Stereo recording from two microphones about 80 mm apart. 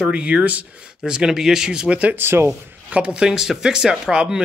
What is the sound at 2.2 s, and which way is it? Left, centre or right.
Speech, right.